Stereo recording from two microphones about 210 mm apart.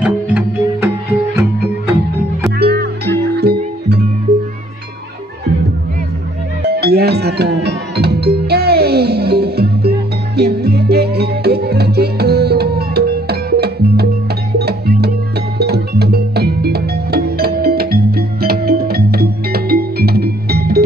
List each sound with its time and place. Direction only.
0.0 s music: 5° right (ahead or behind)
2.6 s music: 50° right (ahead or behind)
6.7 s music: 50° right (ahead or behind)